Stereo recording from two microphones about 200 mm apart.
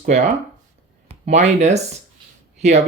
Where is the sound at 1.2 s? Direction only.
35° right (ahead or behind).